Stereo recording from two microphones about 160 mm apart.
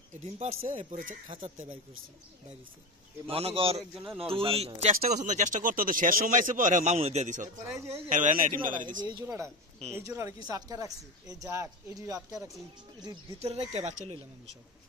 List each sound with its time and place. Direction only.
0.2 s speech: 40° right (ahead or behind)
3.3 s speech: 40° right (ahead or behind)
3.9 s speech: 10° right (ahead or behind)
4.2 s speech: 35° right (ahead or behind)
7.6 s speech: 20° right (ahead or behind)
8.1 s speech: 55° right (ahead or behind)
9.0 s speech: 20° right (ahead or behind)
13.4 s speech: 40° right (ahead or behind)